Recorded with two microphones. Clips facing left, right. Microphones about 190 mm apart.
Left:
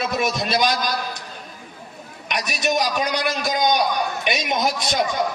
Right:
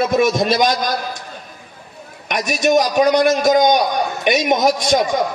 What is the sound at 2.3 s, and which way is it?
A man's voice, 50° right (ahead or behind).